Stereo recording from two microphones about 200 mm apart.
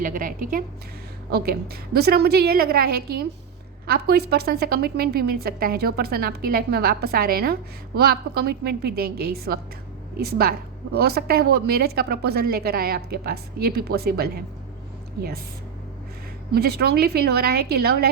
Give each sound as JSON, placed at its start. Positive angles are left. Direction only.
{"t": 0.0, "sound": "a woman's voice", "side_deg": -45}
{"t": 16.6, "sound": "a woman's voice", "side_deg": -50}